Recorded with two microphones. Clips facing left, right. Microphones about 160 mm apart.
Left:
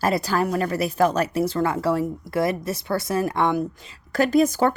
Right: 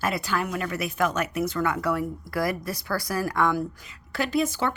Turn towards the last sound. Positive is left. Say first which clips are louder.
# left 7 dB
turn(degrees=45)  # may be behind; listen again after turning